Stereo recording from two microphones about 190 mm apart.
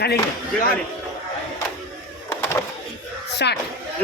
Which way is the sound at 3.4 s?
60° left (ahead or behind).